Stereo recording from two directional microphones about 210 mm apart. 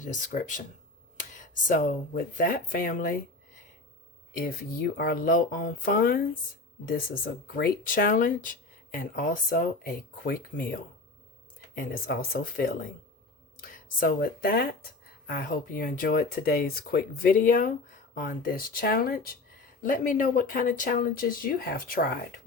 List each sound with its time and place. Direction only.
0.0 s speech: 40° left (ahead or behind)
4.4 s speech: 45° left (ahead or behind)